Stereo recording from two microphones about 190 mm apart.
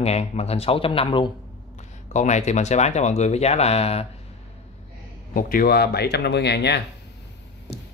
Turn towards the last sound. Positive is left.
turn(degrees=60)  # may be behind; listen again after turning